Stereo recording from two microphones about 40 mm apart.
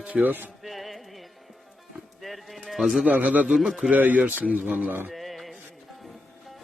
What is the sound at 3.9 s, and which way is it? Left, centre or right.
Speech, right.